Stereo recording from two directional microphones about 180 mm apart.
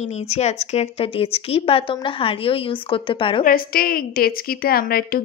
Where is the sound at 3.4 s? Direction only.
55° left (ahead or behind).